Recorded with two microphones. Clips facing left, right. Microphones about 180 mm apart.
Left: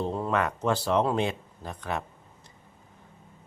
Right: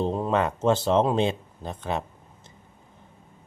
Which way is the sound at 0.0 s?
20° right (ahead or behind).